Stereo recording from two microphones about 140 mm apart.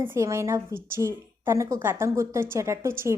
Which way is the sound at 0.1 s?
20° right (ahead or behind).